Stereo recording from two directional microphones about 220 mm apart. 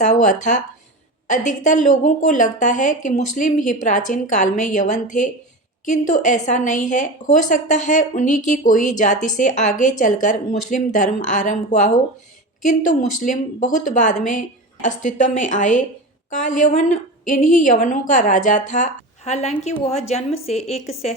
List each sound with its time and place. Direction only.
0.0 s a woman's voice: 35° left (ahead or behind)